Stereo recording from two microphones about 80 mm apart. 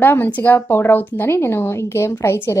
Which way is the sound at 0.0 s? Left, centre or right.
Left.